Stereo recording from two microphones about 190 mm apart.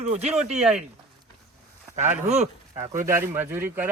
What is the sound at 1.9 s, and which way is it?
Speech, 40° right (ahead or behind).